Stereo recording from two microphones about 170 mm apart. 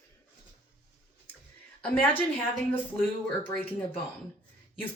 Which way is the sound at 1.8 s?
10° left (ahead or behind).